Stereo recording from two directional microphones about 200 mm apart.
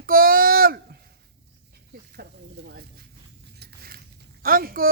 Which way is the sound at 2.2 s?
55° right (ahead or behind).